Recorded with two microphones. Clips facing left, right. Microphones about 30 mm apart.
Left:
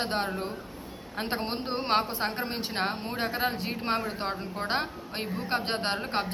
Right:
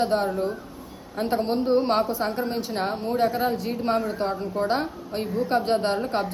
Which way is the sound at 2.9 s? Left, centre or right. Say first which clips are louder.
Right 7 dB; left.